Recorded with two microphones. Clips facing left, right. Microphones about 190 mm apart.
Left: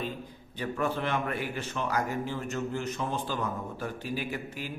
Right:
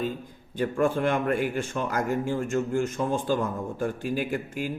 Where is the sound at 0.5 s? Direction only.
50° right (ahead or behind).